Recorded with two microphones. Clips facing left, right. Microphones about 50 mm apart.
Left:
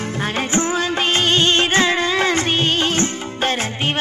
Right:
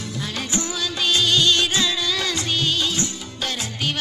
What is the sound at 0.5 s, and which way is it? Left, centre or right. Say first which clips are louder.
Music: left 7 dB; left.